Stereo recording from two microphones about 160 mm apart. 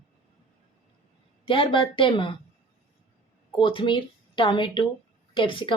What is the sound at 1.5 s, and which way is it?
Speech, 30° left (ahead or behind).